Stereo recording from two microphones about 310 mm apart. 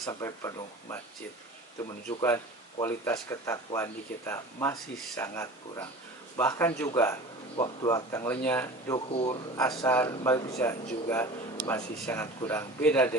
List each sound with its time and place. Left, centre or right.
0.0 s speech: centre
2.0 s speech: centre